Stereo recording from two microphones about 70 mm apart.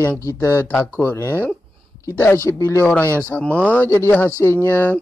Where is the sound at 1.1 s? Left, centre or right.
Left.